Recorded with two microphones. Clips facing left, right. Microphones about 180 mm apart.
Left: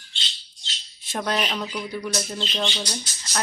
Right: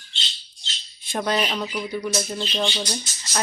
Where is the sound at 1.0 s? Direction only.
Centre (ahead or behind).